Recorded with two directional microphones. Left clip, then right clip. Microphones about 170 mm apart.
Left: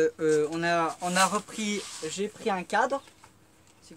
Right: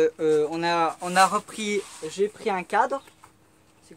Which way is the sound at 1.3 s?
10° right (ahead or behind).